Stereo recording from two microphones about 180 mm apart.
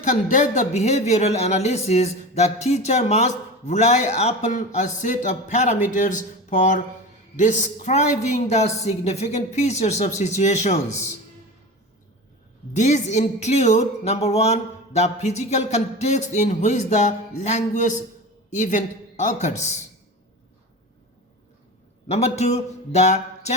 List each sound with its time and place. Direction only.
0.3 s speech: 45° left (ahead or behind)
12.7 s a woman's voice: 40° left (ahead or behind)
22.1 s speech: 35° left (ahead or behind)